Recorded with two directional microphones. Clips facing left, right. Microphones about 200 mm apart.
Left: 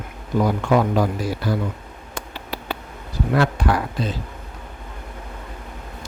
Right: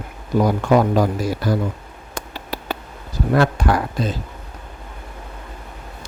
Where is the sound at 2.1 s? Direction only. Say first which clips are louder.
Right 2 dB; 40° right (ahead or behind).